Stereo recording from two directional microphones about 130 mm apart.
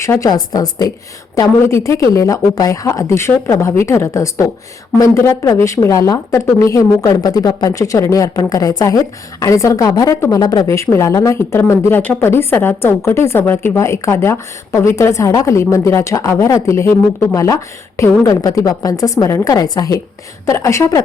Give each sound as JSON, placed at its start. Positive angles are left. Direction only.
{"t": 0.0, "sound": "speech", "side_deg": 25}